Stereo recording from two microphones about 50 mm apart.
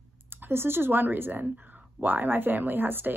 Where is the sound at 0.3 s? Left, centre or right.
Right.